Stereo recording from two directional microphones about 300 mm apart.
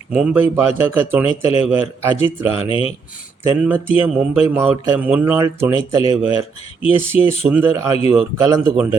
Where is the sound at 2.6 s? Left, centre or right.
Centre.